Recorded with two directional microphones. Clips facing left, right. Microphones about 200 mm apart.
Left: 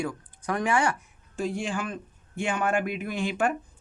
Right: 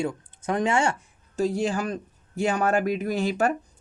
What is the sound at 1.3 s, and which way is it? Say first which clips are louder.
Speech: right 5 dB; 40° right (ahead or behind).